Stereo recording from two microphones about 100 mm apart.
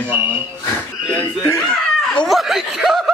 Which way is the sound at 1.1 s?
20° left (ahead or behind).